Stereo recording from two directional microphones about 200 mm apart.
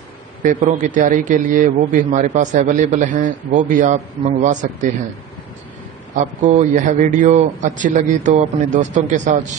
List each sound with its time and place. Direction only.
0.4 s a man's voice: 40° right (ahead or behind)
6.1 s a man's voice: 35° right (ahead or behind)